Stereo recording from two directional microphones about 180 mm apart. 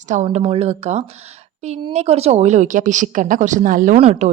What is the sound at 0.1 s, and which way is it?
Speech, 40° right (ahead or behind).